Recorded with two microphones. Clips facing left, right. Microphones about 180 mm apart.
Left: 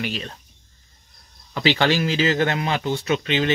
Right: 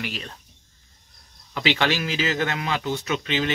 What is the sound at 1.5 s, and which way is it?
Speech, 35° left (ahead or behind).